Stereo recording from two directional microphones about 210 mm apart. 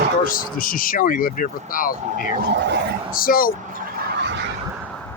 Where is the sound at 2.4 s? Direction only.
55° right (ahead or behind).